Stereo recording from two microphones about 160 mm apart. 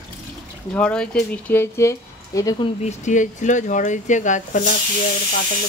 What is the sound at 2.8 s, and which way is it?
Speech, 45° left (ahead or behind).